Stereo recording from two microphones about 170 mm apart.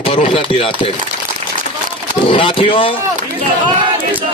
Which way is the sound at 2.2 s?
30° left (ahead or behind).